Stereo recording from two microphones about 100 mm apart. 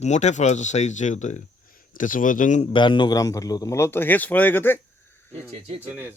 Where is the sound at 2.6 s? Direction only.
55° left (ahead or behind); by 3.7 s 35° left (ahead or behind).